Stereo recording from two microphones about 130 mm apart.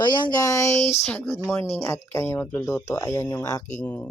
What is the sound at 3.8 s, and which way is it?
Speech, 15° left (ahead or behind).